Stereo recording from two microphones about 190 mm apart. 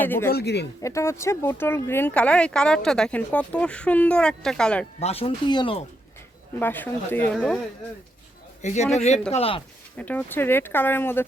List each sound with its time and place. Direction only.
0.0 s speech: 10° left (ahead or behind)
0.3 s speech: 55° left (ahead or behind)
0.8 s speech: 15° left (ahead or behind)
4.9 s speech: 30° left (ahead or behind)
6.6 s speech: 10° left (ahead or behind)
7.3 s speech: centre (ahead or behind)
8.6 s speech: 35° left (ahead or behind)
10.0 s speech: 10° left (ahead or behind)